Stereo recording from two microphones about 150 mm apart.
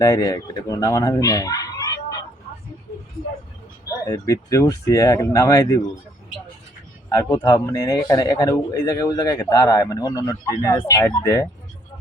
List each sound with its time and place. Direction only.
0.0 s speech: 25° left (ahead or behind)
3.8 s a man's voice: 20° left (ahead or behind)
7.1 s a man's voice: 25° left (ahead or behind)